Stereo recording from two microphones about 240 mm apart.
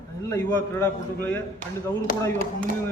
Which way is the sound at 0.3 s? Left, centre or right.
Centre.